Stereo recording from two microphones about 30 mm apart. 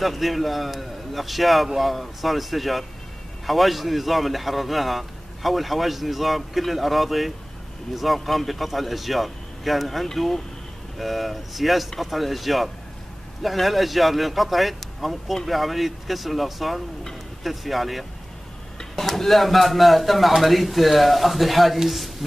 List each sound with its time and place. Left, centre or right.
0.0 s a man's voice: centre